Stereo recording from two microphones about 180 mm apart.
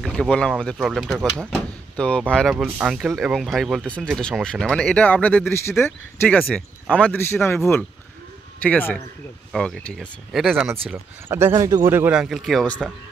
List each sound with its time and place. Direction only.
0.0 s a man's voice: 5° left (ahead or behind)